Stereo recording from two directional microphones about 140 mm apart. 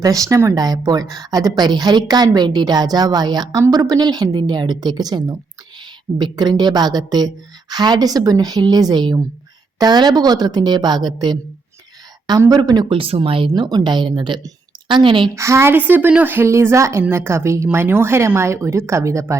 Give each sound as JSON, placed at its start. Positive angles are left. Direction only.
{"t": 0.0, "sound": "a woman's voice", "side_deg": -25}
{"t": 15.4, "sound": "a woman's voice", "side_deg": -20}